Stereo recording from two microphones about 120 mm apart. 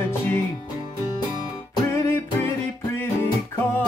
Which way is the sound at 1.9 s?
20° left (ahead or behind).